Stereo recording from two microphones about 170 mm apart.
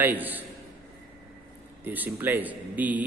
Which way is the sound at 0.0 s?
10° right (ahead or behind).